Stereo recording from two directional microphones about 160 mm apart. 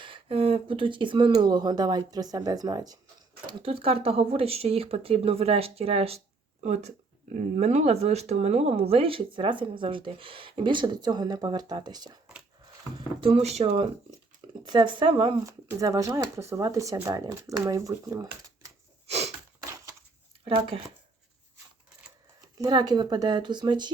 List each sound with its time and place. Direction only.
0.0 s speech: 35° right (ahead or behind)
3.4 s speech: 35° right (ahead or behind)
13.0 s speech: 35° right (ahead or behind)
15.4 s speech: 20° right (ahead or behind)
19.0 s a sound: 40° right (ahead or behind)
20.4 s speech: 35° right (ahead or behind)
22.4 s speech: 25° right (ahead or behind)